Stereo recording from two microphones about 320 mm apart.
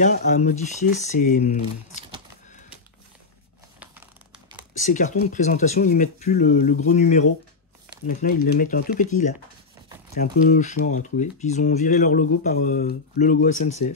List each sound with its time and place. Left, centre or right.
0.0 s speech: left
4.7 s speech: left